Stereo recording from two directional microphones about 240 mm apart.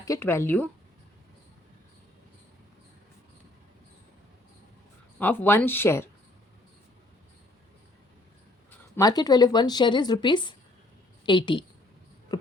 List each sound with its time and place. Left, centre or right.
0.0 s a woman's voice: centre
5.2 s a woman's voice: centre
9.0 s a woman's voice: centre